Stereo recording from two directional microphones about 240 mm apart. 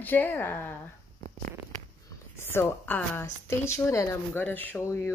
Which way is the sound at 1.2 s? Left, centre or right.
Right.